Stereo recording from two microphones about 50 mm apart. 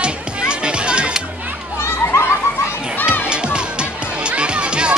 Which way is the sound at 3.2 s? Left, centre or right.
Centre.